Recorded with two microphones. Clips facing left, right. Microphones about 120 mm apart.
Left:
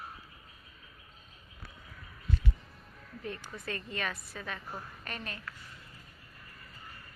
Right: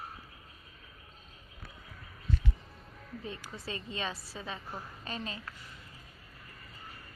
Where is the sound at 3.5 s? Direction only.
30° right (ahead or behind).